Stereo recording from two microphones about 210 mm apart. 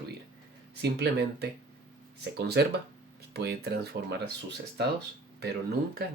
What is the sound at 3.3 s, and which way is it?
Speech, 50° right (ahead or behind).